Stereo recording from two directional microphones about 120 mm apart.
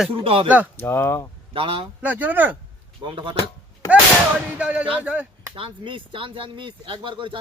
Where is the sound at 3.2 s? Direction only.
45° right (ahead or behind).